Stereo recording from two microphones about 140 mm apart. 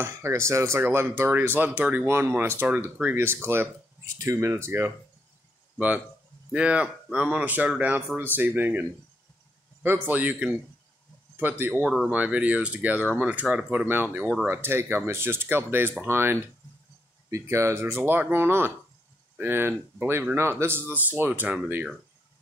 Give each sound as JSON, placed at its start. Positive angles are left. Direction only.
{"t": 0.0, "sound": "speech", "side_deg": -20}
{"t": 6.5, "sound": "speech", "side_deg": -5}
{"t": 9.8, "sound": "speech", "side_deg": -15}
{"t": 11.8, "sound": "speech", "side_deg": 0}
{"t": 12.1, "sound": "speech", "side_deg": -10}